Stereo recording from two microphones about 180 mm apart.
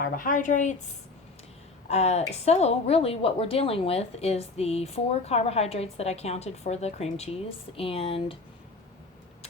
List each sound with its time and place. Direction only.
0.0 s a woman's voice: 50° left (ahead or behind)
1.9 s a woman's voice: 35° left (ahead or behind)